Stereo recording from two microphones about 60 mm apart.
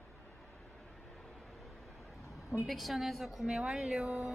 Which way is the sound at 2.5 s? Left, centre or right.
Centre.